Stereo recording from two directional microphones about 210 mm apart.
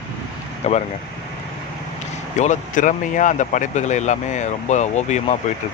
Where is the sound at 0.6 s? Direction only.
30° left (ahead or behind).